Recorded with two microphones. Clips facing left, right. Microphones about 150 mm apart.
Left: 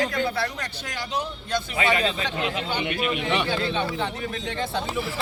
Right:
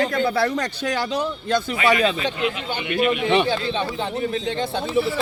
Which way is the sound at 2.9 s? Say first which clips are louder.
Right 11 dB; 50° right (ahead or behind).